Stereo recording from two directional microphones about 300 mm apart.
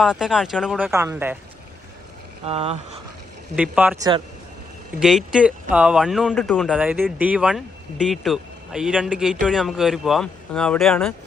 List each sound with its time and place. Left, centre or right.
0.0 s speech: centre
2.4 s speech: centre
3.5 s speech: centre
4.9 s speech: centre